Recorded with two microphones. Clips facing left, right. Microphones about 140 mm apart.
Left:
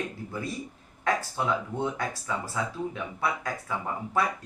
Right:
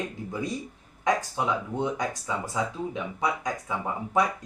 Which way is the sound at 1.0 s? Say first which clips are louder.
Right 2 dB; 15° right (ahead or behind).